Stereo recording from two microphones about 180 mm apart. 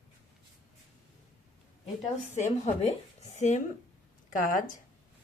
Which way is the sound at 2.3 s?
40° left (ahead or behind).